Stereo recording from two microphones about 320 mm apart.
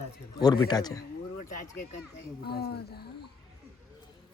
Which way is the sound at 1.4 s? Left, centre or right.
Left.